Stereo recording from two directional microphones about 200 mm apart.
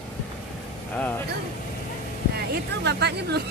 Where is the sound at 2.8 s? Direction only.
55° right (ahead or behind).